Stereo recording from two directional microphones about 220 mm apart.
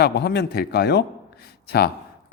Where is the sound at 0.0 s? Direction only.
50° left (ahead or behind).